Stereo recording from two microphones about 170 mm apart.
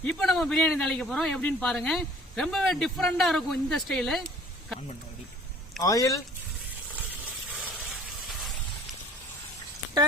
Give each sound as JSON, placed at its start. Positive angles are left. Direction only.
{"t": 0.0, "sound": "speech", "side_deg": 5}
{"t": 5.8, "sound": "speech", "side_deg": 20}